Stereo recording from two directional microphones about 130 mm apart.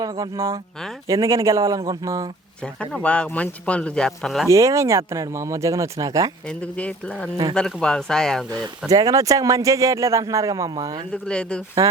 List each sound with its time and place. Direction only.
0.0 s speech: 25° right (ahead or behind)
2.9 s speech: 10° left (ahead or behind)
4.4 s speech: 25° right (ahead or behind)
6.7 s speech: 10° left (ahead or behind)
8.5 s speech: 30° right (ahead or behind)
11.1 s speech: 5° left (ahead or behind)